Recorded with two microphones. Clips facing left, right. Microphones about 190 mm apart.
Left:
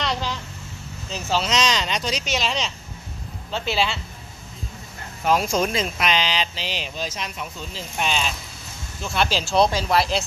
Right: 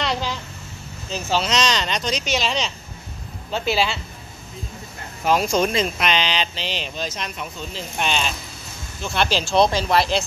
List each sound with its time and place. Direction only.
0.0 s a sound: 5° right (ahead or behind)
1.1 s speech: centre (ahead or behind)
5.2 s speech: centre (ahead or behind)